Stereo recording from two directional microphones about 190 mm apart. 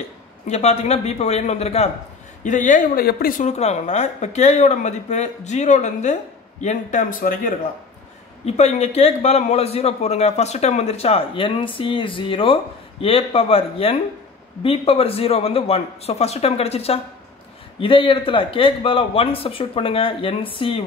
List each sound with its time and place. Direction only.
0.5 s a man's voice: 35° left (ahead or behind)
8.5 s a man's voice: 35° left (ahead or behind)